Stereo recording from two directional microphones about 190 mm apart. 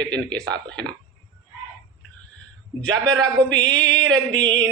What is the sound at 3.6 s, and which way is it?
Music, 5° left (ahead or behind).